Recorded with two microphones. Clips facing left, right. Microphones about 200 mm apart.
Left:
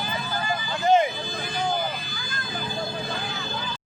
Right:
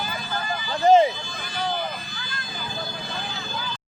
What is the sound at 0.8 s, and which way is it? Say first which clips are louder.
Speech: right 4 dB; 35° right (ahead or behind).